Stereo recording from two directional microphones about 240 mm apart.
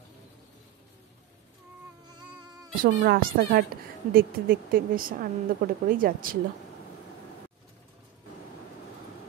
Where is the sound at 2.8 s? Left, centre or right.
Right.